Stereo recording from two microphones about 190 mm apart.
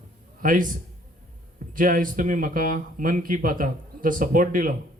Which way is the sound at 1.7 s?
45° right (ahead or behind).